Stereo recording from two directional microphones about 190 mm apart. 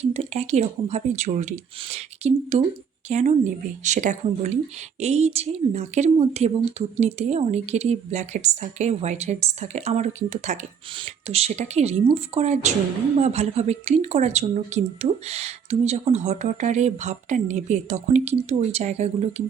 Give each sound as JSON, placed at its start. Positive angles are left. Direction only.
{"t": 0.0, "sound": "a woman's voice", "side_deg": -35}